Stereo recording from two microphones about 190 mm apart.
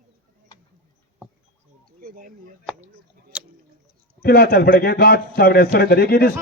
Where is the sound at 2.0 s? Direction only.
50° right (ahead or behind).